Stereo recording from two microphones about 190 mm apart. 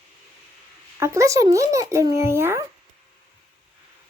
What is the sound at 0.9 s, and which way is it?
Speech, 15° right (ahead or behind).